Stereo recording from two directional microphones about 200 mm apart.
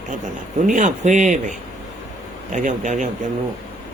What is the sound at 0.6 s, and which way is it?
Speech, 40° right (ahead or behind).